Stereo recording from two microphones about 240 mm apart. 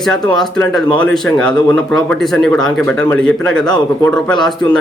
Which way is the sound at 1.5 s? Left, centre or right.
Centre.